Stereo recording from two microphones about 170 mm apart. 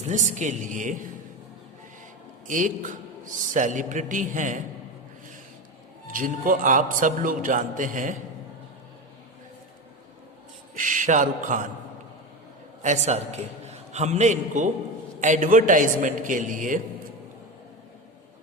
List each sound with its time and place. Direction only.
0.1 s a man's voice: 45° right (ahead or behind)
2.5 s a man's voice: 50° right (ahead or behind)
6.1 s a man's voice: 55° right (ahead or behind)
10.8 s a man's voice: 50° right (ahead or behind)
12.8 s a man's voice: 45° right (ahead or behind)